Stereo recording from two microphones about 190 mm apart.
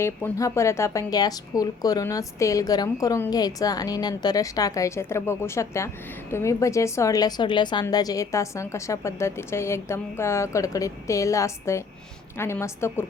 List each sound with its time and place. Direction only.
0.0 s a woman's voice: 15° left (ahead or behind)